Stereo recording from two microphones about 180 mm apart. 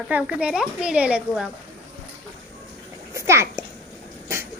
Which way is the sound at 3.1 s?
15° right (ahead or behind).